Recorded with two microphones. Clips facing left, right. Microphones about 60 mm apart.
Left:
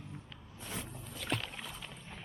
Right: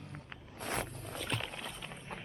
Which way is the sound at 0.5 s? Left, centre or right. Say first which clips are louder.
Right 6 dB; right.